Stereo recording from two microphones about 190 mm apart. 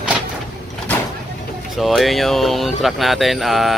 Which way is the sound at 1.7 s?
Centre (ahead or behind).